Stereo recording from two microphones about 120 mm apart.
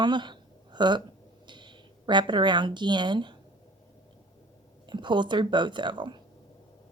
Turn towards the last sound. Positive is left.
turn(degrees=-40)  # may be behind; listen again after turning